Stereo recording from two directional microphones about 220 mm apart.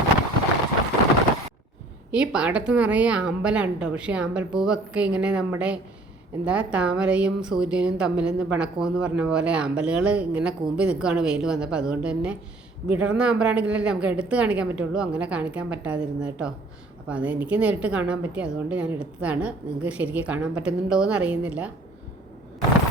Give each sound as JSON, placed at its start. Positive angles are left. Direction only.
{"t": 2.1, "sound": "a woman's voice", "side_deg": -5}